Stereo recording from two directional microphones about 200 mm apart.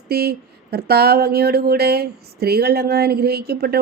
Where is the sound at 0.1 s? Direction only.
50° right (ahead or behind).